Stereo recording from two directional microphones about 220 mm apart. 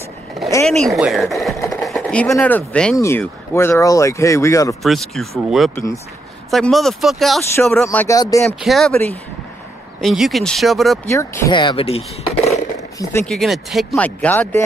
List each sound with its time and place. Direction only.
0.7 s speech: centre (ahead or behind)
1.7 s a sound: centre (ahead or behind)
2.3 s speech: 5° left (ahead or behind)
4.8 s speech: centre (ahead or behind)
8.5 s speech: centre (ahead or behind)
11.1 s speech: 15° left (ahead or behind)
13.2 s speech: centre (ahead or behind)